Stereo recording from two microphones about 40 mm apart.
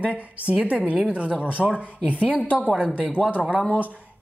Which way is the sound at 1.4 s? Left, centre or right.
Right.